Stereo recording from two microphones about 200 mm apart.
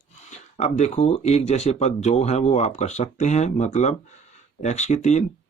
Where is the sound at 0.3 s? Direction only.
35° left (ahead or behind).